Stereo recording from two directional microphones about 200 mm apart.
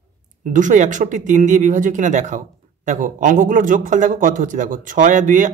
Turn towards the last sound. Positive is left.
turn(degrees=-40)  # may be behind; listen again after turning